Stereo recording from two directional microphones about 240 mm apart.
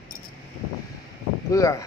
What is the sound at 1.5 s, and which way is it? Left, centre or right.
Speech, centre.